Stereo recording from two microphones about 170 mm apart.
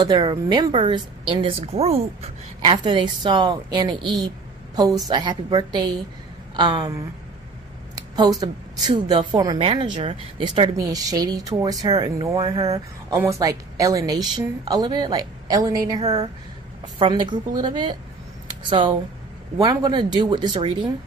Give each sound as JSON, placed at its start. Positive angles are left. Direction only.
{"t": 0.0, "sound": "a woman's voice", "side_deg": -25}
{"t": 5.0, "sound": "a woman's voice", "side_deg": -25}
{"t": 7.9, "sound": "a woman's voice", "side_deg": -25}